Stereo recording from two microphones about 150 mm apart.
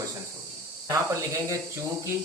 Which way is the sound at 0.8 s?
20° right (ahead or behind).